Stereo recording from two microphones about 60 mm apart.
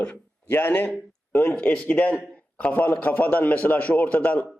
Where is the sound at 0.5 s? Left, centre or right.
Left.